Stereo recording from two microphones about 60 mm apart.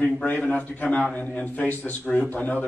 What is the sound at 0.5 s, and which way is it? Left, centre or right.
A man's voice, left.